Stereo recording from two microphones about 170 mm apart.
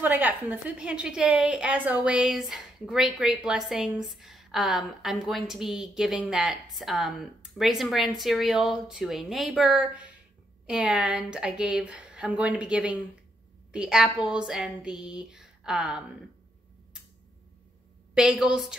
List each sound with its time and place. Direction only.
0.0 s a woman's voice: 10° right (ahead or behind)
18.1 s a woman's voice: 5° right (ahead or behind)